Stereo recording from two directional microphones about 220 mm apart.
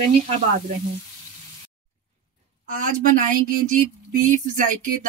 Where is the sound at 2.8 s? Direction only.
35° right (ahead or behind).